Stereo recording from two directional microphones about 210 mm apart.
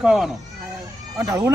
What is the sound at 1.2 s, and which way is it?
Speech, 15° right (ahead or behind).